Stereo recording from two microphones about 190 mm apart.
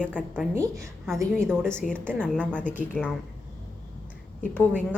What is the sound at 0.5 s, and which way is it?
Speech, 15° right (ahead or behind).